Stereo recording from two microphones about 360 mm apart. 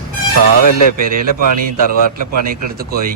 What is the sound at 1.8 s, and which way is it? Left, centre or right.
Speech, left.